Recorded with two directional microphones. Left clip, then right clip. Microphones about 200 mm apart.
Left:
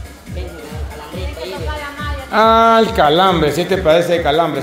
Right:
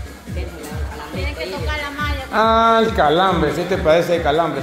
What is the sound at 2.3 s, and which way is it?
Speech, 25° left (ahead or behind).